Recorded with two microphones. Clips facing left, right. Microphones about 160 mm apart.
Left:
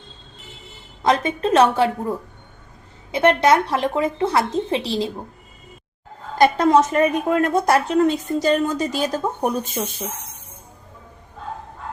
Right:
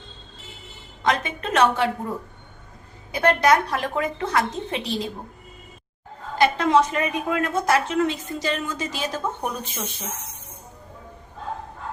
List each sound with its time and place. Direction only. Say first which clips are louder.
1.0 s a woman's voice: left 5 dB; 30° left (ahead or behind)
3.1 s a woman's voice: left 3 dB; 25° left (ahead or behind)
6.4 s a woman's voice: left 4 dB; 40° left (ahead or behind)